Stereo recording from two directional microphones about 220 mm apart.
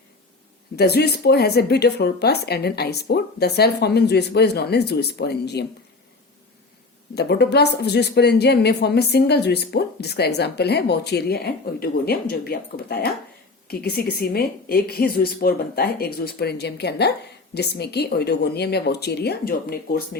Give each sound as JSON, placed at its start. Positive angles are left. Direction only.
{"t": 0.8, "sound": "speech", "side_deg": 45}
{"t": 7.1, "sound": "speech", "side_deg": 50}